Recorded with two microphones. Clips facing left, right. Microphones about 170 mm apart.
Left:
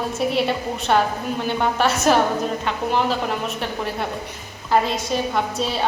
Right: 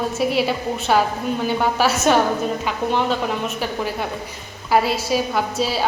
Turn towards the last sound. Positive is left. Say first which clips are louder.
# right 1 dB
turn(degrees=-5)  # may be behind; listen again after turning